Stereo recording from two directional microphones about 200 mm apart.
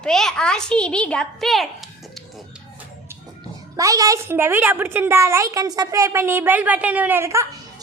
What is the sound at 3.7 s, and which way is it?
A woman's voice, 15° right (ahead or behind).